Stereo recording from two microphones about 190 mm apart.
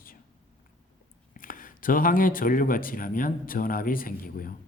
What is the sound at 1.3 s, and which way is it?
Speech, 45° left (ahead or behind).